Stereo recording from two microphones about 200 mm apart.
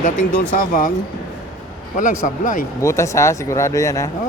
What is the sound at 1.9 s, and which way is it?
Speech, 40° left (ahead or behind).